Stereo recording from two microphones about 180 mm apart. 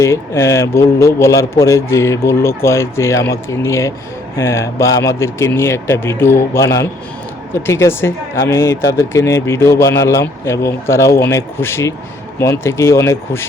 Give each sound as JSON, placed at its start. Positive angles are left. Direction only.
{"t": 0.0, "sound": "speech", "side_deg": 15}